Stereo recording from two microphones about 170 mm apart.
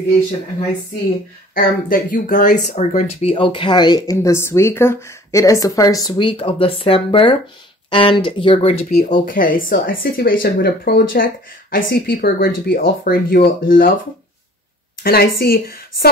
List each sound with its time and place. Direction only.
1.5 s speech: 55° left (ahead or behind)
3.3 s speech: 30° left (ahead or behind)
8.9 s speech: 55° left (ahead or behind)
15.0 s speech: 60° left (ahead or behind)